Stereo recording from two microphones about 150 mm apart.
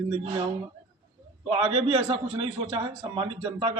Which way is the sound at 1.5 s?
40° right (ahead or behind).